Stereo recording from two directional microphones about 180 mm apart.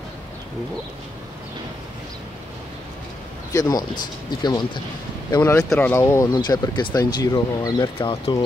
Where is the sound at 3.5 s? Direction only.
20° left (ahead or behind).